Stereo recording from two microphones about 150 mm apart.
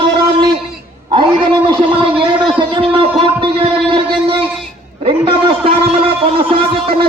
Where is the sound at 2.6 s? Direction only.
35° right (ahead or behind).